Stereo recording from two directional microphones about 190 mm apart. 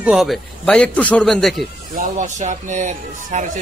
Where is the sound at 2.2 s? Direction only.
40° right (ahead or behind).